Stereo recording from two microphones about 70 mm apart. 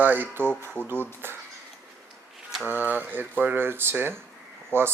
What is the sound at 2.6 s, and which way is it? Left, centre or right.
Speech, right.